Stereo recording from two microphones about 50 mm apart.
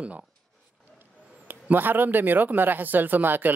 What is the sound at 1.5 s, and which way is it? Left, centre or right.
Speech, right.